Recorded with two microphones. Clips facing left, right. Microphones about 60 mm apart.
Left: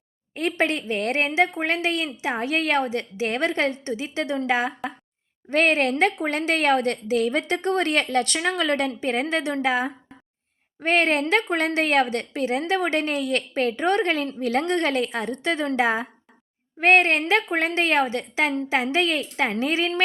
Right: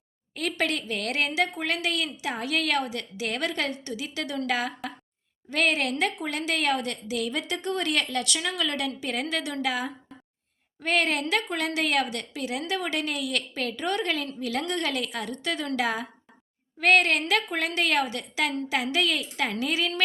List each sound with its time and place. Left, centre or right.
0.3 s a woman's voice: left
5.5 s a woman's voice: left